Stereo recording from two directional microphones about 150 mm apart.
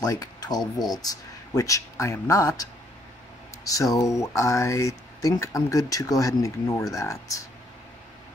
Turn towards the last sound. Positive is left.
turn(degrees=20)  # may be behind; listen again after turning